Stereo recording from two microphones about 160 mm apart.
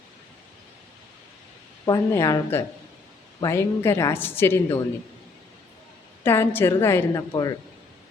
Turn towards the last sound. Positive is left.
turn(degrees=25)  # may be behind; listen again after turning